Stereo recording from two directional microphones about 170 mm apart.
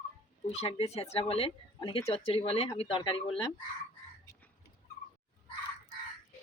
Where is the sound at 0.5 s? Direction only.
35° left (ahead or behind).